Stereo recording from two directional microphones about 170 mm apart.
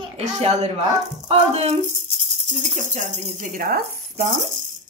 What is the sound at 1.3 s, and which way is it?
Speech, 35° right (ahead or behind).